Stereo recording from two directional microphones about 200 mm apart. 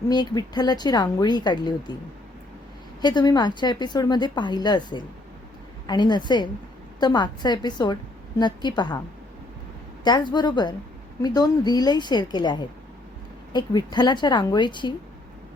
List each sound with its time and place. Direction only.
0.1 s a woman's voice: 20° left (ahead or behind)
3.0 s a woman's voice: 20° left (ahead or behind)
10.0 s a woman's voice: 20° left (ahead or behind)